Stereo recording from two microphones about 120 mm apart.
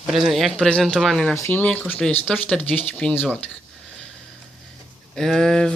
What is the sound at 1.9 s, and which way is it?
Speech, 5° left (ahead or behind).